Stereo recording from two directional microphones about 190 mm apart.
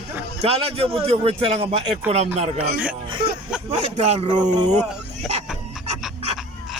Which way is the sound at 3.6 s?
30° right (ahead or behind).